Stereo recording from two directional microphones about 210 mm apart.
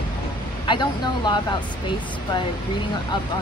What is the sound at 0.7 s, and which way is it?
Speech, 20° left (ahead or behind).